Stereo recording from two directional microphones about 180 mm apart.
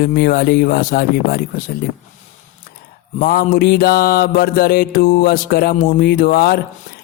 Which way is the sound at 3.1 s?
50° left (ahead or behind).